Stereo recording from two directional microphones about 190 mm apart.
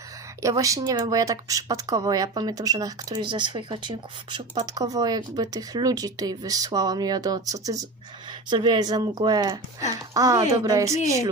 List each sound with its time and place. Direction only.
0.4 s speech: 15° right (ahead or behind)